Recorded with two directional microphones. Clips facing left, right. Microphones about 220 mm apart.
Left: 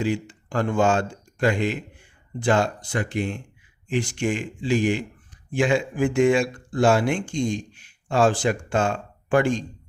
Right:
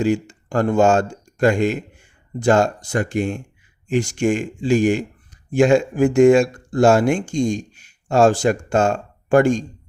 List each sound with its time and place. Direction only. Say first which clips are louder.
0.0 s speech: right 6 dB; 45° right (ahead or behind)